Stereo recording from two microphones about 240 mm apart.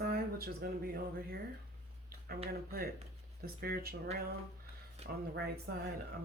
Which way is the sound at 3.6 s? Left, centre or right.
Right.